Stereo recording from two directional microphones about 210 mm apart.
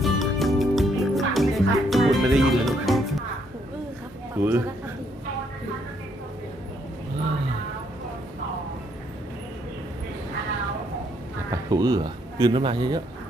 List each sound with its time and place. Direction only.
0.0 s music: centre (ahead or behind)
4.4 s a man's voice: 10° right (ahead or behind)
11.5 s speech: 15° right (ahead or behind)